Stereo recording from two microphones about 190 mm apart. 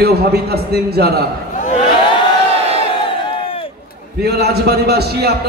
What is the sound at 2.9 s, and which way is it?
Crowd, 30° left (ahead or behind).